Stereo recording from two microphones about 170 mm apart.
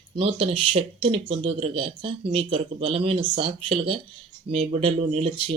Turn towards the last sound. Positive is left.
turn(degrees=-30)  # may be behind; listen again after turning